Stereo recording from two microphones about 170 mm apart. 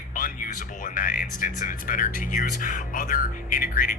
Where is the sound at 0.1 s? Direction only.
55° left (ahead or behind).